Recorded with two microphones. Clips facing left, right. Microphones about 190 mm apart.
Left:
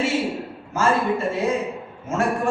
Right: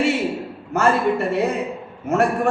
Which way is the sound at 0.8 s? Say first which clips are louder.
Right 3 dB; 65° right (ahead or behind).